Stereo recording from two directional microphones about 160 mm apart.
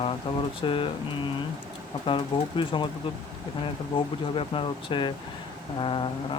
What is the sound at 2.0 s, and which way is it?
Speech, 30° left (ahead or behind).